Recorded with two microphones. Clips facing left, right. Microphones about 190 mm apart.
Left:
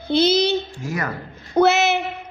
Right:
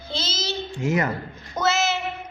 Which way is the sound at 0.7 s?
20° right (ahead or behind).